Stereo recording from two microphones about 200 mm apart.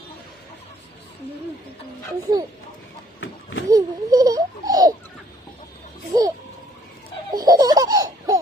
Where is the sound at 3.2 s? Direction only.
85° left.